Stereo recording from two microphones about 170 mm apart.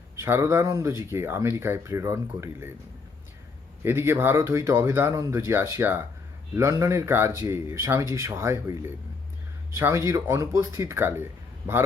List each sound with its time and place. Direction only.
0.2 s speech: 15° right (ahead or behind)
3.8 s speech: 15° right (ahead or behind)